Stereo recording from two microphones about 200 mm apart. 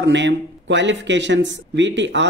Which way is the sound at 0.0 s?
65° right (ahead or behind).